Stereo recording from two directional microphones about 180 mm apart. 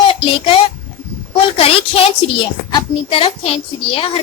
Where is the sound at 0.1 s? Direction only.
30° left (ahead or behind).